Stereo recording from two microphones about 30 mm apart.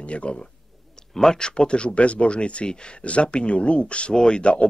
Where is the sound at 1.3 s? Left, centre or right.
Left.